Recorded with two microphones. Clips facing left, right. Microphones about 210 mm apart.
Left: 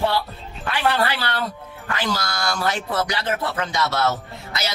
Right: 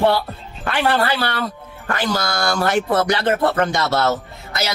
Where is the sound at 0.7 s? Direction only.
55° right (ahead or behind).